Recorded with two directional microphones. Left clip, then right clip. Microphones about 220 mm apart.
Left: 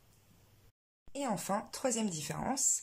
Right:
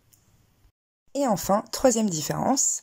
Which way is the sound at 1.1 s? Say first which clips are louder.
Right 12 dB; 25° right (ahead or behind).